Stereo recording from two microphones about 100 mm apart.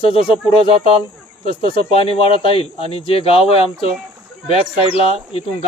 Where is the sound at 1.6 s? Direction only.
70° left (ahead or behind).